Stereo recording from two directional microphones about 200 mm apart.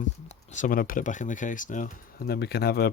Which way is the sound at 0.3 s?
40° left (ahead or behind).